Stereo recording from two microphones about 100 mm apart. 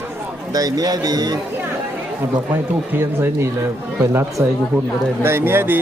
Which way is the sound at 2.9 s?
20° right (ahead or behind).